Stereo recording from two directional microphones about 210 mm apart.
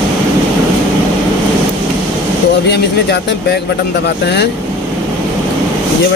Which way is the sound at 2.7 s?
50° left (ahead or behind).